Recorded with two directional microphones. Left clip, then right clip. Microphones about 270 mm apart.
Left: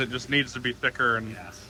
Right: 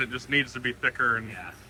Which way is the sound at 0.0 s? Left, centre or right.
Centre.